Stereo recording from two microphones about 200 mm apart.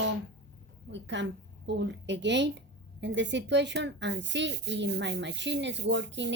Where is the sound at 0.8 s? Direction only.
65° right (ahead or behind).